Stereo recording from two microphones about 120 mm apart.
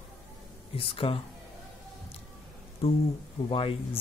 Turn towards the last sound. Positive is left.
turn(degrees=50)  # may be behind; listen again after turning